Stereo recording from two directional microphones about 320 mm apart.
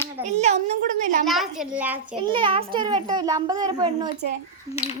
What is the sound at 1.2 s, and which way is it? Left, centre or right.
A child's voice, centre.